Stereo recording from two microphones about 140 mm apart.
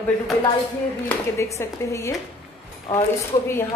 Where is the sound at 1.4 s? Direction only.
20° left (ahead or behind).